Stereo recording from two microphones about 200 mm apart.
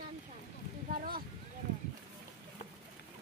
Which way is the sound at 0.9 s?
45° right (ahead or behind).